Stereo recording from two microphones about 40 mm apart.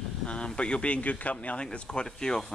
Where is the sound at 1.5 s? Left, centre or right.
Left.